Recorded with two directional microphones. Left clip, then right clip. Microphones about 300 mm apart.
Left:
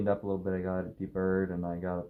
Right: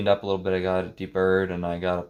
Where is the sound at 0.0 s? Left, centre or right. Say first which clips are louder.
Right 8 dB; right.